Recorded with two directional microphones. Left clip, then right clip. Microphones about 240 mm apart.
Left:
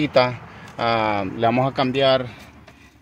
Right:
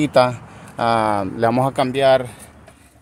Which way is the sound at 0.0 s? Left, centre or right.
Centre.